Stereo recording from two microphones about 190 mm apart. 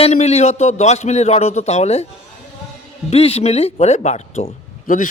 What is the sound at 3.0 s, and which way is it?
A man's voice, 30° left (ahead or behind).